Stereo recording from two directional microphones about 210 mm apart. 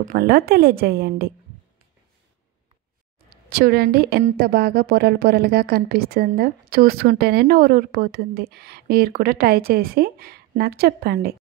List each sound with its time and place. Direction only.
0.0 s a woman's voice: 45° right (ahead or behind)
3.3 s a woman's voice: 45° right (ahead or behind)